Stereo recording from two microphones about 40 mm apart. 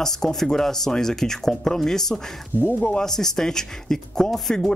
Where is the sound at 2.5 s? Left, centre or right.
Right.